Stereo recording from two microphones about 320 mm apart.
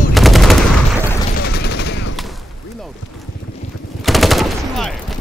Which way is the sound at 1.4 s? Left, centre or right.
Left.